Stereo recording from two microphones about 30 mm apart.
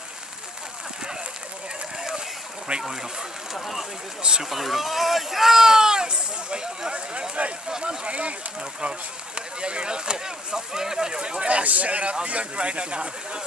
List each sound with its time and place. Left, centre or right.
2.9 s speech: centre
4.4 s speech: centre; by 6.7 s right
6.9 s speech: right
11.4 s speech: right